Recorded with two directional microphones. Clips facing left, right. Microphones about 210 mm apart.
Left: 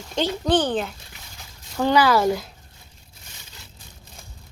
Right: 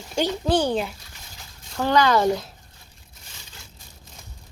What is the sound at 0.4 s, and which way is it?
Speech, 10° right (ahead or behind).